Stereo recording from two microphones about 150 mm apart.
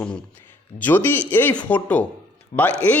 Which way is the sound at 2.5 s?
55° left (ahead or behind).